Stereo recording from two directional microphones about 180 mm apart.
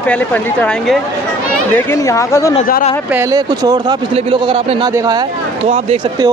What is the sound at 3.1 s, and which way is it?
A man's voice, 15° right (ahead or behind).